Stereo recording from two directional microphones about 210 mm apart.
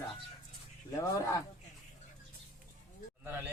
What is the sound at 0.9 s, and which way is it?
Speech, 15° left (ahead or behind).